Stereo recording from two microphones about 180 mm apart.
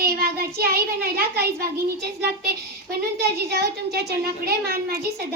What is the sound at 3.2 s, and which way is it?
A child's voice, 65° right (ahead or behind).